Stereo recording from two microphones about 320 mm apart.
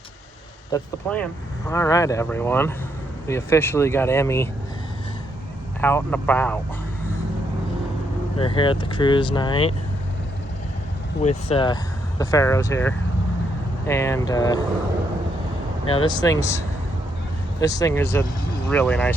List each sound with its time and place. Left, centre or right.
0.7 s speech: centre
5.8 s speech: centre
8.4 s speech: centre
11.2 s speech: centre
15.9 s speech: centre